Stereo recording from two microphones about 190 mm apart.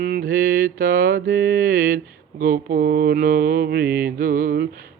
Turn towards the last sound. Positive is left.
turn(degrees=-45)  # may be behind; listen again after turning